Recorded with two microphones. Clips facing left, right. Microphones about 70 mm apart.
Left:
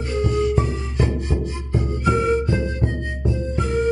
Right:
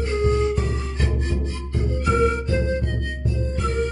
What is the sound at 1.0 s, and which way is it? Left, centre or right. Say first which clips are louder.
Music: left 5 dB; left.